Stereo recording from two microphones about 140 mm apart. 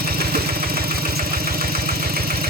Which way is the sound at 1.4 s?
90° right.